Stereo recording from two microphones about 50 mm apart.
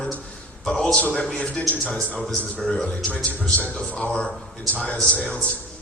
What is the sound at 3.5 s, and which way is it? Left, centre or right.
A man's voice, left.